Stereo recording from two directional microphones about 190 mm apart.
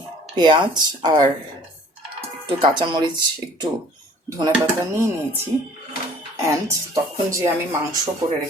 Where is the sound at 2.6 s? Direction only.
25° right (ahead or behind).